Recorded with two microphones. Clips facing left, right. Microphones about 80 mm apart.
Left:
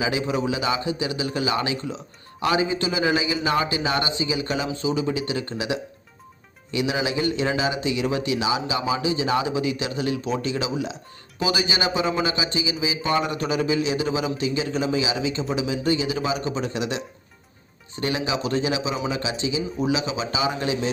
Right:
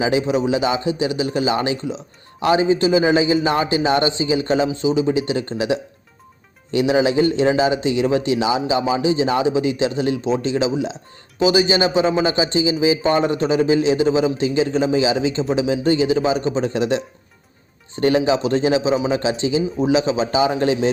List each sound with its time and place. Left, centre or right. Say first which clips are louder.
0.0 s a man's voice: right 6 dB; right